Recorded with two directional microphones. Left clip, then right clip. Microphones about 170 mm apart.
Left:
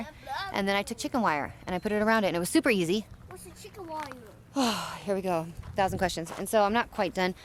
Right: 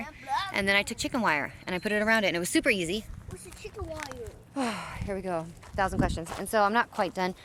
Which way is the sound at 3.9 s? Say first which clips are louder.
Left 4 dB; 65° right (ahead or behind).